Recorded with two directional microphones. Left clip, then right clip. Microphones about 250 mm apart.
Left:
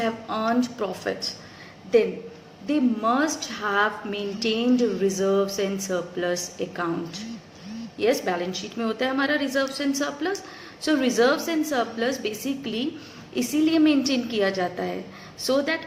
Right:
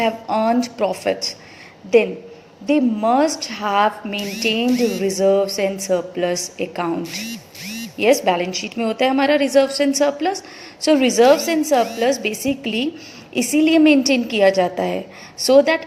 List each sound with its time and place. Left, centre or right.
0.0 s a woman's voice: right
2.6 s a woman's voice: right